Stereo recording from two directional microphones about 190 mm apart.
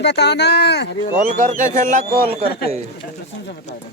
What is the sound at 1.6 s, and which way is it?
Speech, 40° right (ahead or behind).